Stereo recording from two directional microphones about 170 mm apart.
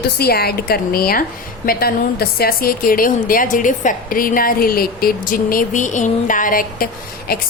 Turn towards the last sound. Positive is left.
turn(degrees=60)  # may be behind; listen again after turning